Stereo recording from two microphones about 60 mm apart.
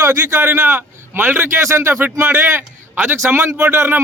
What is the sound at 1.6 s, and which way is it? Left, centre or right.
A man's voice, right.